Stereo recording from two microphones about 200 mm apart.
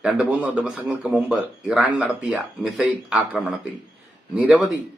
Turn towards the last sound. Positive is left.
turn(degrees=-5)  # may be behind; listen again after turning